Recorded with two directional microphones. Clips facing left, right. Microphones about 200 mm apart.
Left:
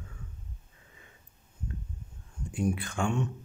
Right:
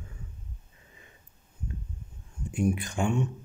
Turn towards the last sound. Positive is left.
turn(degrees=-15)  # may be behind; listen again after turning